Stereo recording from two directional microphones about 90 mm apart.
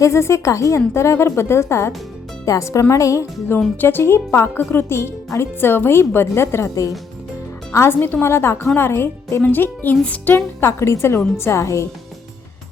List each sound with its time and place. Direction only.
0.0 s a woman's voice: 30° left (ahead or behind)
3.8 s a woman's voice: 25° left (ahead or behind)